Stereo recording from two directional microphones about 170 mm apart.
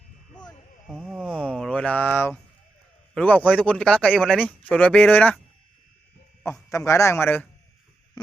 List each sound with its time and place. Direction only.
0.9 s speech: centre (ahead or behind)
6.4 s speech: 15° left (ahead or behind)